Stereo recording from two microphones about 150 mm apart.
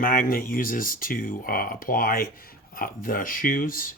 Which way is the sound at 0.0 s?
70° left (ahead or behind).